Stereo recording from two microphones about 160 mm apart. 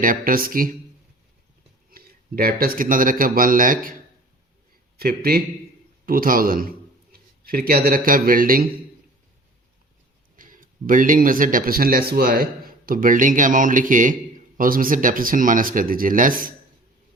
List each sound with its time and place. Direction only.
0.0 s speech: 60° right (ahead or behind)
1.9 s a man's voice: 70° right (ahead or behind)
4.9 s a man's voice: 70° right (ahead or behind)
10.3 s speech: 60° right (ahead or behind)